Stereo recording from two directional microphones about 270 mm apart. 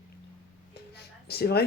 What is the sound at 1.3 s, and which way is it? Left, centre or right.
Speech, left.